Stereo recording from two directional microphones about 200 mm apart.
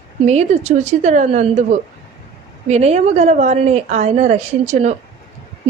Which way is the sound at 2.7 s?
35° right (ahead or behind).